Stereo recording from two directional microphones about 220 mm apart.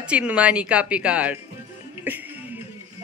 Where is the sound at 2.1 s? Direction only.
10° right (ahead or behind).